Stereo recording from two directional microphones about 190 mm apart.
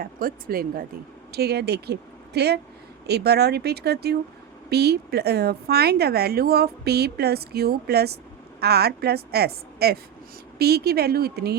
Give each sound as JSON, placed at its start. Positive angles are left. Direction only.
{"t": 0.0, "sound": "a woman's voice", "side_deg": -50}